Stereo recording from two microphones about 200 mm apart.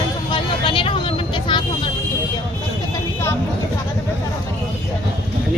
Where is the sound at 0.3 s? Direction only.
25° left (ahead or behind).